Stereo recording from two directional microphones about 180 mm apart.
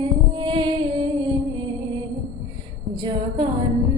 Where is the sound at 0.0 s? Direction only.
25° right (ahead or behind).